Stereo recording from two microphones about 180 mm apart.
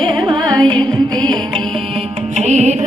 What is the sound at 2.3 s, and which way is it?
Music, 40° right (ahead or behind).